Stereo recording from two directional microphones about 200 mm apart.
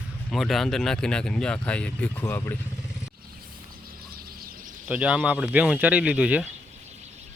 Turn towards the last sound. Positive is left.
turn(degrees=-5)  # may be behind; listen again after turning